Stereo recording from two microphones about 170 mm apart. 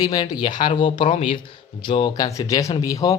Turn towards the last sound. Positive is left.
turn(degrees=20)  # may be behind; listen again after turning